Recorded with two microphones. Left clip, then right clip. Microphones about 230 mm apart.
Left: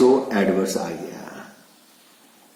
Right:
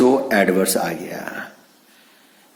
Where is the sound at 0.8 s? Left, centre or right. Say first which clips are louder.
Right 5 dB; right.